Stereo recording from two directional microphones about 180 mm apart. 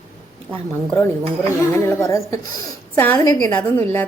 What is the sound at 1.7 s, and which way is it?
A woman's voice, 15° left (ahead or behind).